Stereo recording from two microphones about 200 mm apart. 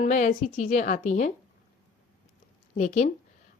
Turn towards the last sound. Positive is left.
turn(degrees=35)  # may be behind; listen again after turning